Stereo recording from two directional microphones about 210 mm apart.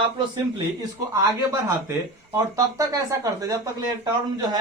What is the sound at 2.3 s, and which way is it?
A man's voice, 15° right (ahead or behind).